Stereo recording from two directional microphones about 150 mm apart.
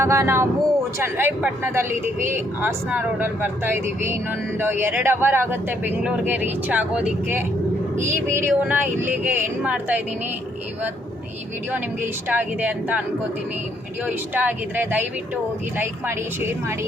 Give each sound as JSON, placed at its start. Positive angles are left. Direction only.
{"t": 0.0, "sound": "speech", "side_deg": -20}
{"t": 12.3, "sound": "speech", "side_deg": -10}
{"t": 14.1, "sound": "speech", "side_deg": -10}